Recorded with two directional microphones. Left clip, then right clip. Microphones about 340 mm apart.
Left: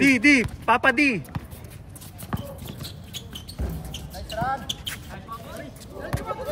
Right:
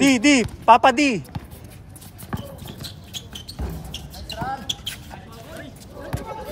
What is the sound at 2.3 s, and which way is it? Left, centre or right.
Clip-clop, centre.